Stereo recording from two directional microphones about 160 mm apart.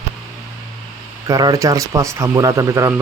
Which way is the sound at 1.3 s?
20° right (ahead or behind).